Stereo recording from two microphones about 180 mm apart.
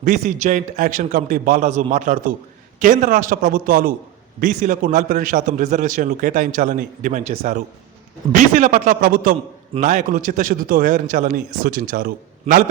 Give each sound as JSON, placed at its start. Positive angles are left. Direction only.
{"t": 0.0, "sound": "a man's voice", "side_deg": -45}